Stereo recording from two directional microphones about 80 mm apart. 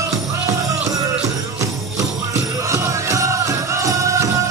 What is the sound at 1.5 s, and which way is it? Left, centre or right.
Music, right.